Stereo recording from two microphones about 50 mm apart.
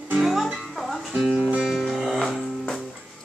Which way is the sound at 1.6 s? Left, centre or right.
Centre.